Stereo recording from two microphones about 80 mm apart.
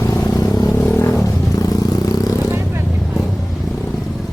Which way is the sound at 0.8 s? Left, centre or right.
Left.